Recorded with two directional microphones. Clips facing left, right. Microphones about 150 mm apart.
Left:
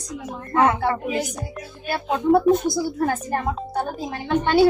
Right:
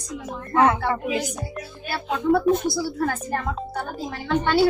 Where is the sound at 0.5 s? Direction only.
20° left (ahead or behind).